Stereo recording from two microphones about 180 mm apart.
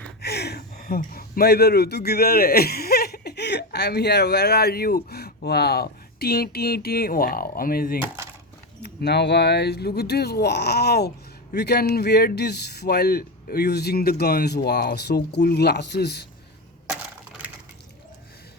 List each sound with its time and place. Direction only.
0.2 s speech: 65° left (ahead or behind)
8.0 s speech: 15° right (ahead or behind)
8.8 s a man's voice: 65° left (ahead or behind)